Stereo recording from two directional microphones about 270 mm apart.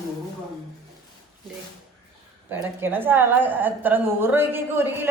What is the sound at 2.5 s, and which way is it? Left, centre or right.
A woman's voice, centre.